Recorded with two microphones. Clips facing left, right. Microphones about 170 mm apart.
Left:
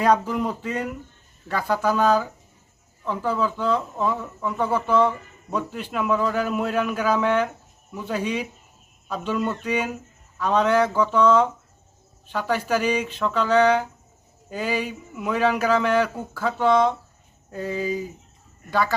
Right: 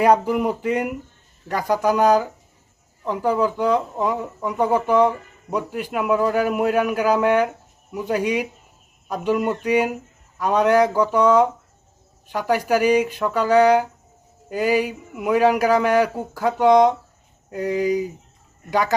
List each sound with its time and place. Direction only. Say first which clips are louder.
0.0 s speech: right 4 dB; 10° right (ahead or behind)